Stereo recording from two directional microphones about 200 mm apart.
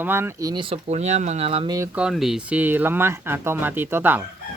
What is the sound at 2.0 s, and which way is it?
Speech, centre (ahead or behind).